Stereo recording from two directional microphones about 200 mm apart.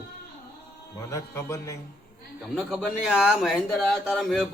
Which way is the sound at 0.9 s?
15° left (ahead or behind).